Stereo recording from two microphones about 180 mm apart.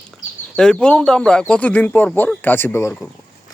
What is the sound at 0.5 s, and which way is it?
Speech, 5° left (ahead or behind).